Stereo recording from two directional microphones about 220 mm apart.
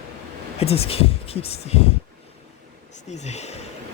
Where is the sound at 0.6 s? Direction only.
25° left (ahead or behind).